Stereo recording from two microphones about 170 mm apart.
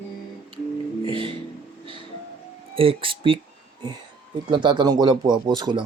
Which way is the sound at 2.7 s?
30° right (ahead or behind).